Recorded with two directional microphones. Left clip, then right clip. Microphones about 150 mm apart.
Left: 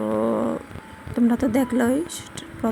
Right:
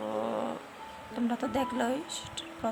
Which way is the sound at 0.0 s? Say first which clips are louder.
Left 10 dB; 20° left (ahead or behind).